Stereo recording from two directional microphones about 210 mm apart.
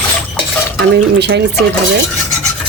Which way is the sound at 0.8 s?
55° right (ahead or behind).